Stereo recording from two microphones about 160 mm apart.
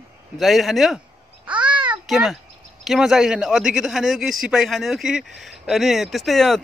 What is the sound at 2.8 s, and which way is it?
A man's voice, centre (ahead or behind).